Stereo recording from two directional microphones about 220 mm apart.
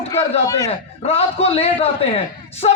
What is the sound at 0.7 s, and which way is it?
A man's voice, 25° left (ahead or behind).